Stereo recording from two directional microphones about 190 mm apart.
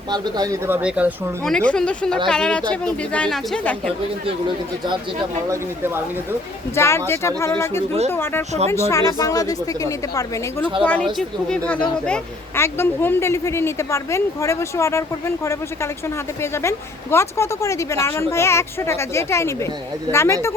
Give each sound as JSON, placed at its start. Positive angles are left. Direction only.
{"t": 0.1, "sound": "speech", "side_deg": -20}
{"t": 1.5, "sound": "speech", "side_deg": 5}
{"t": 5.5, "sound": "speech", "side_deg": -10}
{"t": 6.7, "sound": "speech", "side_deg": 15}
{"t": 10.8, "sound": "speech", "side_deg": 5}